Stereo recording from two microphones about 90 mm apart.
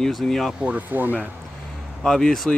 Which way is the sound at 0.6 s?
20° right (ahead or behind).